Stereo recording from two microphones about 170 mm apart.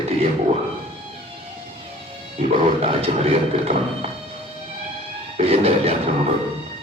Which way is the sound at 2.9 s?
35° right (ahead or behind).